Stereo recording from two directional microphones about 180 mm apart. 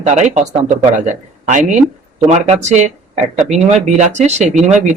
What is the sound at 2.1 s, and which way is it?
Speech, 40° right (ahead or behind).